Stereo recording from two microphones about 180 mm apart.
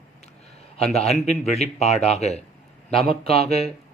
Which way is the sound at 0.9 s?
35° left (ahead or behind).